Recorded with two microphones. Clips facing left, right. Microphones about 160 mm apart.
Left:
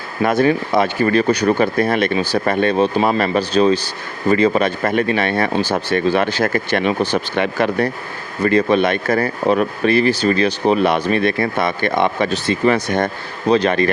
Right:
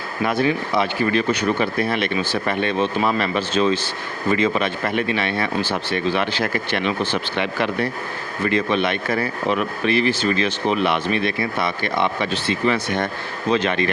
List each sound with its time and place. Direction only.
0.2 s speech: 45° left (ahead or behind)